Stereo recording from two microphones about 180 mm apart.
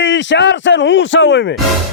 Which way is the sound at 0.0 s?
90° left.